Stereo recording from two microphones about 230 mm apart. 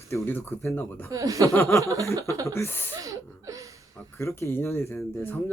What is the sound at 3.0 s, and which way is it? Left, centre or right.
Speech, centre.